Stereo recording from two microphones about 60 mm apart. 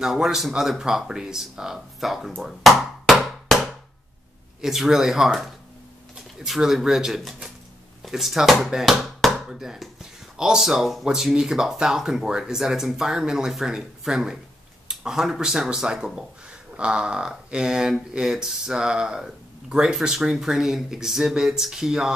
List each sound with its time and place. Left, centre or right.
0.0 s speech: centre
2.4 s music: centre
4.6 s speech: centre